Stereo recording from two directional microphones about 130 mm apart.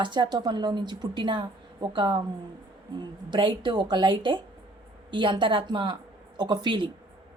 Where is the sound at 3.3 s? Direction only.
40° right (ahead or behind).